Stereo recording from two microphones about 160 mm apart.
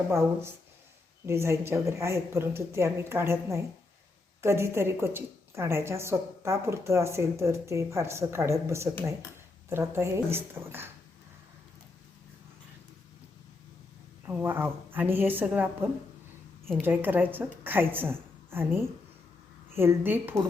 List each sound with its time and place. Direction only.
0.1 s a woman's voice: 15° right (ahead or behind)
14.3 s a woman's voice: 15° right (ahead or behind)